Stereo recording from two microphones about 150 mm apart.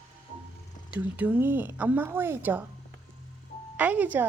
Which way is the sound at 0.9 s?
10° right (ahead or behind).